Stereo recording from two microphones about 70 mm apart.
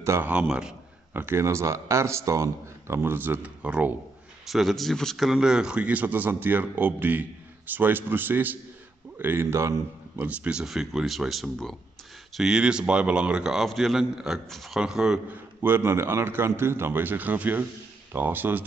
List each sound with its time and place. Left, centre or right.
0.2 s speech: centre
1.1 s speech: right; by 3.9 s centre
4.5 s speech: centre; by 9.8 s right
10.1 s speech: right
10.6 s speech: centre
12.4 s speech: centre
14.8 s speech: centre
15.2 s speech: right